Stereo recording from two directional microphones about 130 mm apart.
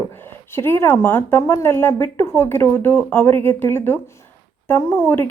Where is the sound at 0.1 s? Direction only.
15° left (ahead or behind).